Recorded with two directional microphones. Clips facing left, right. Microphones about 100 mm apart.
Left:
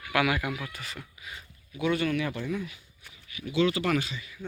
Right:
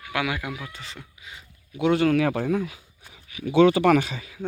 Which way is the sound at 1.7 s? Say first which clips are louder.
Right 7 dB; 75° right (ahead or behind).